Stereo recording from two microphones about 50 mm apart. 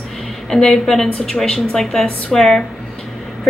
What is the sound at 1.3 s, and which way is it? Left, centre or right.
A woman's voice, centre.